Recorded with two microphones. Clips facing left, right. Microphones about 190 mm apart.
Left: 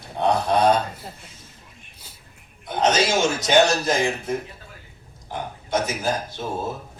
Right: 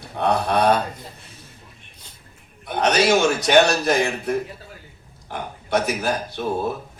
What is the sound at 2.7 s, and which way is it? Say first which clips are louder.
Speech: even; 60° right (ahead or behind).